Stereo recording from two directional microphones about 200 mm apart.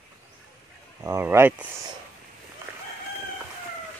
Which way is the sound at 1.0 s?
15° right (ahead or behind).